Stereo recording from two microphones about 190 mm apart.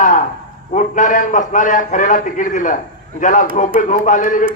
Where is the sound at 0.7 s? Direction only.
40° left (ahead or behind).